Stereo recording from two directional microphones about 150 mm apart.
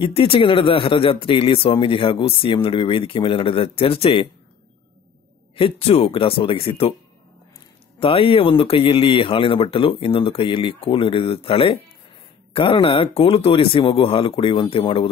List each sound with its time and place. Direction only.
0.0 s speech: 35° left (ahead or behind)
5.6 s speech: 40° left (ahead or behind)
8.0 s speech: 35° left (ahead or behind)